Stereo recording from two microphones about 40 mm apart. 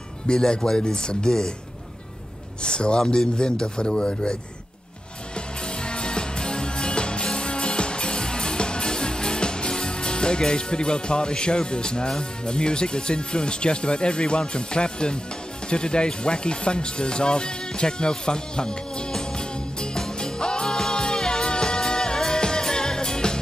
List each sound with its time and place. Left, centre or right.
0.3 s speech: left
2.6 s speech: left
5.8 s music: left
12.2 s speech: left
15.7 s music: left